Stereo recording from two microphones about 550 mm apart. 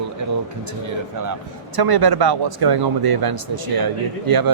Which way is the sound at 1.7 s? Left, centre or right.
Right.